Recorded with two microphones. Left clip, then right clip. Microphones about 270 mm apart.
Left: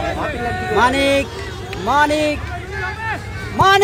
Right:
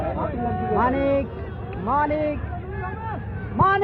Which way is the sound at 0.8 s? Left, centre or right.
Left.